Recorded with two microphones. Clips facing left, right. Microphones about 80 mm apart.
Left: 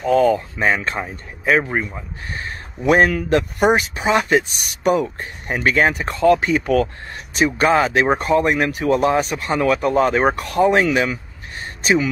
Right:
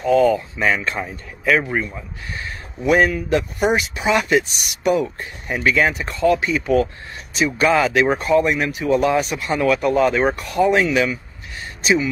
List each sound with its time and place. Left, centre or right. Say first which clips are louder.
0.0 s speech: even; left
1.6 s a man's voice: left 1 dB; left
2.3 s speech: left 1 dB; left